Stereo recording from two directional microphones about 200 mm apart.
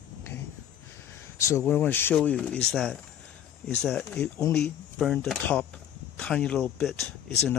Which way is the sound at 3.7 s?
5° left (ahead or behind).